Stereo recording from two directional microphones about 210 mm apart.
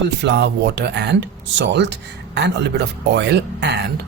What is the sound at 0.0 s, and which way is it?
Speech, 55° right (ahead or behind).